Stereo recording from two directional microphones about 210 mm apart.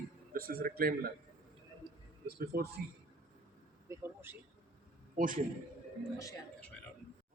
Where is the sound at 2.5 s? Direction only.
45° right (ahead or behind).